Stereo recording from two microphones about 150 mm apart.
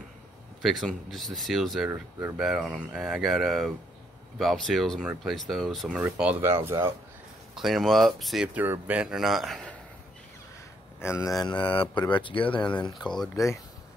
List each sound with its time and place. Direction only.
0.6 s speech: centre (ahead or behind)
1.9 s speech: 20° right (ahead or behind)
2.3 s speech: centre (ahead or behind)
7.5 s speech: centre (ahead or behind)
8.5 s speech: 10° right (ahead or behind)
11.2 s speech: 25° left (ahead or behind)
13.0 s speech: 5° left (ahead or behind)